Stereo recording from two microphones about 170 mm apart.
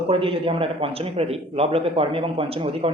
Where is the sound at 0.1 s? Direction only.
35° right (ahead or behind).